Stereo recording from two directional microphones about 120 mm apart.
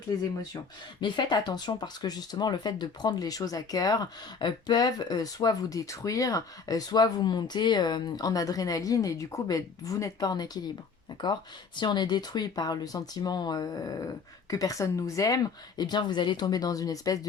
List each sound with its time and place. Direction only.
0.1 s speech: 30° left (ahead or behind)